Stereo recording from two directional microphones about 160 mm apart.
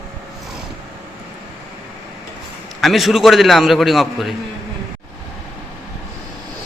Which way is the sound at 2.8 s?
Centre (ahead or behind).